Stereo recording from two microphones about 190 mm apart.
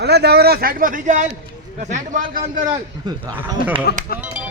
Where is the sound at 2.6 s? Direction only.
20° right (ahead or behind).